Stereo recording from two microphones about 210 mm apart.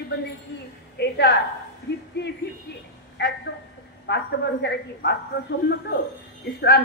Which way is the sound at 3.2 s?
55° left (ahead or behind).